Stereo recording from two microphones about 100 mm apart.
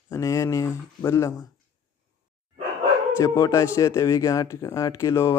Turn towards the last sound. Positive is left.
turn(degrees=30)  # may be behind; listen again after turning